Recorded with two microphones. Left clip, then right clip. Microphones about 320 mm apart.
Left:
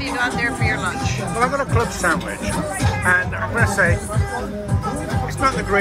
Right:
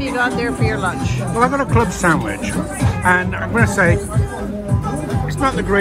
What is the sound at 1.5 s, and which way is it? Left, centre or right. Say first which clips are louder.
Speech: right 3 dB; right.